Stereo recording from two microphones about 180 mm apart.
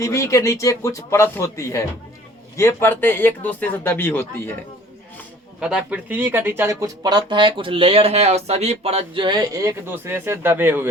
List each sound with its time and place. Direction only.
0.0 s speech: 15° left (ahead or behind)
5.5 s speech: 5° right (ahead or behind)